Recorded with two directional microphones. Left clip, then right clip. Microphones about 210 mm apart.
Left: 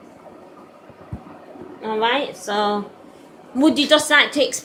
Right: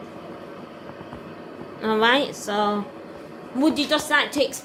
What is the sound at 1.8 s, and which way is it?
Speech, 25° right (ahead or behind).